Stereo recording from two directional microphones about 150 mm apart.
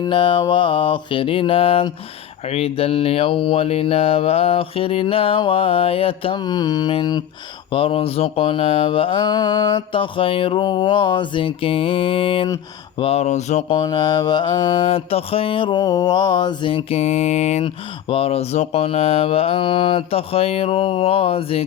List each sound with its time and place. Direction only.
0.0 s mantra: 35° left (ahead or behind); by 13.7 s 50° left (ahead or behind)
13.7 s mantra: 30° left (ahead or behind); by 17.7 s 50° left (ahead or behind)
18.1 s mantra: 40° left (ahead or behind)